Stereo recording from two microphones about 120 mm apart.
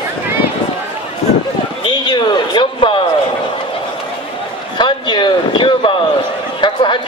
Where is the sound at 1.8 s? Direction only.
40° left (ahead or behind).